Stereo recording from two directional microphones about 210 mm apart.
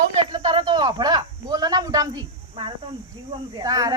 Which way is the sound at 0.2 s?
20° right (ahead or behind).